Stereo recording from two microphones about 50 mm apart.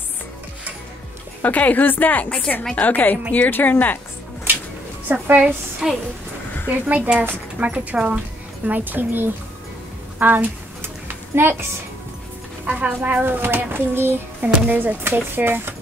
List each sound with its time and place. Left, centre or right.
1.4 s a woman's voice: left
4.5 s a sound: right
5.0 s a woman's voice: right
5.8 s a woman's voice: centre
6.9 s a woman's voice: right
8.6 s a woman's voice: right
11.3 s a woman's voice: right
12.6 s a woman's voice: right
13.2 s speech: right
14.4 s a woman's voice: right
15.1 s speech: right